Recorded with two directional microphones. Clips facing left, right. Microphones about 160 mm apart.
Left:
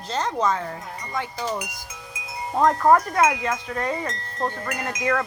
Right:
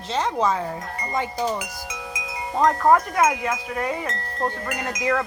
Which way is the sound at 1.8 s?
90° right.